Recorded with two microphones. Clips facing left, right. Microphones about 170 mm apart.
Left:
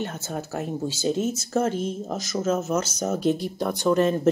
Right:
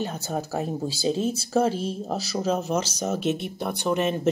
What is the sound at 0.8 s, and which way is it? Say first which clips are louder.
Speech: left 2 dB; 35° right (ahead or behind).